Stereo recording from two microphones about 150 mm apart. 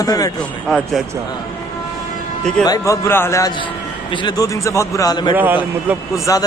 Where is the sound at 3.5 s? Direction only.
35° left (ahead or behind).